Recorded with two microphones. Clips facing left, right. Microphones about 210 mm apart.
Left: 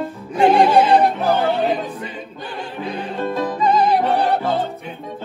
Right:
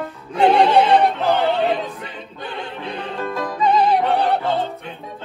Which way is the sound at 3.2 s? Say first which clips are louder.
Left 4 dB; 25° left (ahead or behind).